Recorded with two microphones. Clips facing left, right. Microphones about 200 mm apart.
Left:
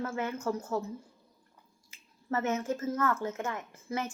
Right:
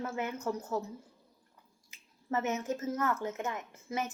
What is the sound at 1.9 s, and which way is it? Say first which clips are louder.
Speech: left 1 dB; 20° right (ahead or behind).